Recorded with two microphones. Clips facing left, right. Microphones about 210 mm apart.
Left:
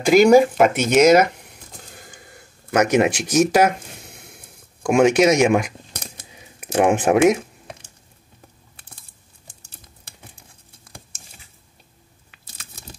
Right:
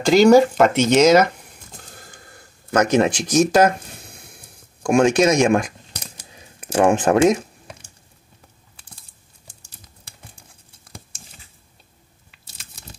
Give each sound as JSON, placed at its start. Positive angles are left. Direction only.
{"t": 0.0, "sound": "speech", "side_deg": 10}
{"t": 2.7, "sound": "speech", "side_deg": 10}
{"t": 5.0, "sound": "speech", "side_deg": 10}
{"t": 6.6, "sound": "speech", "side_deg": 15}